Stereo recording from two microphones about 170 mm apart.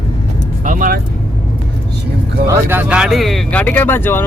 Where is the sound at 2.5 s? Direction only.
10° right (ahead or behind); by 4.2 s 15° left (ahead or behind).